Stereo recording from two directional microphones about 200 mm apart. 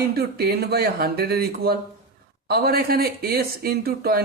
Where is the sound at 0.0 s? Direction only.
50° right (ahead or behind).